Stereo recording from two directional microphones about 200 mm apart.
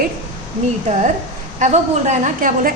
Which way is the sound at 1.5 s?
35° right (ahead or behind).